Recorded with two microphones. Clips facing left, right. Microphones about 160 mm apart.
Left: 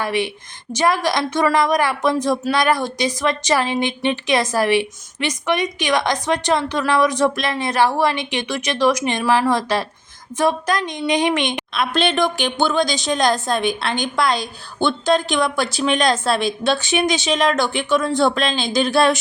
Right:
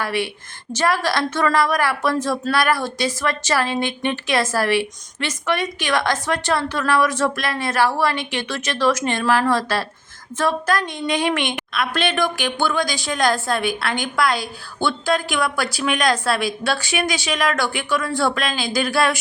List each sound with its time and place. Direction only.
0.0 s a woman's voice: 20° left (ahead or behind)